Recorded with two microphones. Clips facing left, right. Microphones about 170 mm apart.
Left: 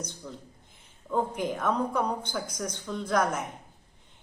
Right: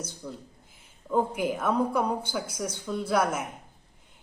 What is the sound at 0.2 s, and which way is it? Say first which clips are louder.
A woman's voice: right 3 dB; 5° right (ahead or behind).